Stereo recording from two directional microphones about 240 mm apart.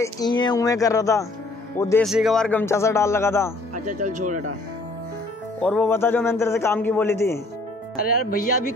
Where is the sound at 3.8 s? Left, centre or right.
Right.